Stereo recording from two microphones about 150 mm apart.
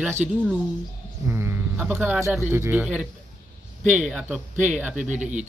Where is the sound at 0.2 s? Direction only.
5° right (ahead or behind).